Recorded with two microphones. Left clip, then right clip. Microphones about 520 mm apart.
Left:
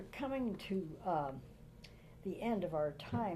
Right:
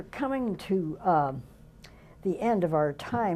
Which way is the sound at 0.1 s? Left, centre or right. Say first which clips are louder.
Right 10 dB; right.